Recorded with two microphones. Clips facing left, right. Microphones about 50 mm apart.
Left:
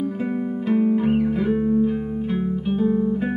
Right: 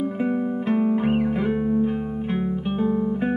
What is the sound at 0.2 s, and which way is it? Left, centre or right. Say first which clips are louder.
Music: right 1 dB; centre.